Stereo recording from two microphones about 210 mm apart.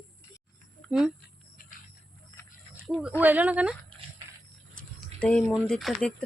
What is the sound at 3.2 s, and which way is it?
Speech, 5° right (ahead or behind).